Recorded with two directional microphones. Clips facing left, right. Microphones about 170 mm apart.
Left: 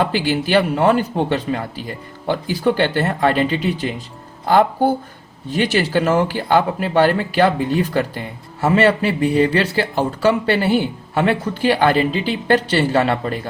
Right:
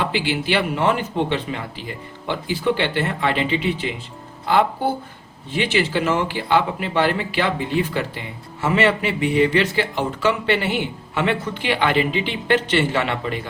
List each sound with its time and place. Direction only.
0.0 s speech: 45° left (ahead or behind)
5.5 s speech: 40° left (ahead or behind)